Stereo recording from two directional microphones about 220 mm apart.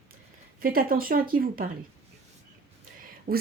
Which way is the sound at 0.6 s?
40° right (ahead or behind).